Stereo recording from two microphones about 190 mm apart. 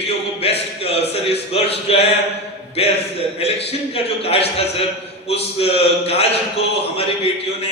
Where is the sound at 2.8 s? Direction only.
30° left (ahead or behind).